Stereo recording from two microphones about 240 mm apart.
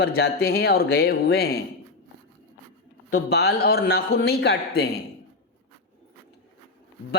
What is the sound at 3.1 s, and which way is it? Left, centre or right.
A man's voice, left.